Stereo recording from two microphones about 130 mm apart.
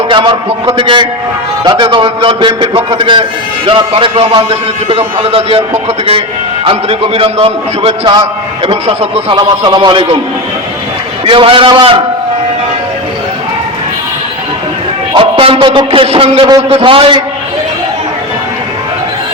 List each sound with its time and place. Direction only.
0.1 s a man's voice: 40° right (ahead or behind)
6.7 s a man's voice: 45° right (ahead or behind)
9.3 s a man's voice: 35° right (ahead or behind)
11.3 s a man's voice: 40° right (ahead or behind)
15.1 s a man's voice: 45° right (ahead or behind)